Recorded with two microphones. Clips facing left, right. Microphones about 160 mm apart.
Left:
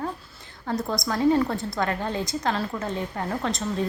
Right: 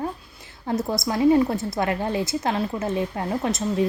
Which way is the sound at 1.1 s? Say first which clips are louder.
Right 3 dB; 15° right (ahead or behind).